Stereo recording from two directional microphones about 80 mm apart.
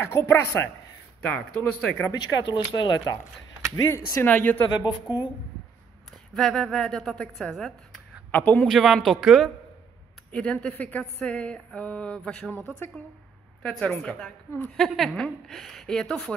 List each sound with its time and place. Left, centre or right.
0.0 s speech: left
1.2 s speech: centre
2.1 s speech: left
3.7 s speech: left
4.3 s speech: left
4.6 s speech: left
6.3 s a woman's voice: centre; by 8.6 s left
8.6 s a woman's voice: centre
10.3 s a woman's voice: centre